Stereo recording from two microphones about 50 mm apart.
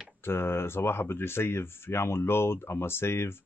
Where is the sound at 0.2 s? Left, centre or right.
Left.